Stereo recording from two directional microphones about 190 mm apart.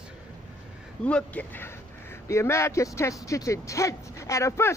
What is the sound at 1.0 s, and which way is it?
Speech, 5° left (ahead or behind).